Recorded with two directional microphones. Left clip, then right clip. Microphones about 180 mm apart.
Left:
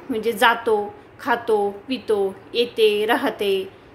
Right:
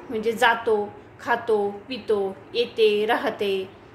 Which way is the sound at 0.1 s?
25° left (ahead or behind).